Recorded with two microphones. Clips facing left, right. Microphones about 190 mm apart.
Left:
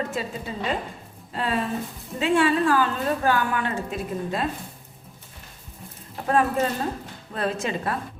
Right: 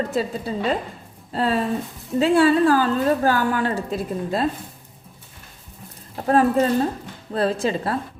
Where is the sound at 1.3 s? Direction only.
35° right (ahead or behind).